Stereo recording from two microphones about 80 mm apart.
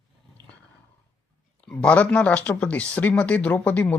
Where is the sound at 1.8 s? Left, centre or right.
Centre.